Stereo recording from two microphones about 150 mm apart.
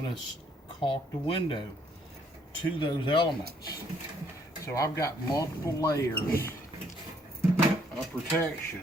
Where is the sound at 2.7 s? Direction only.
35° left (ahead or behind).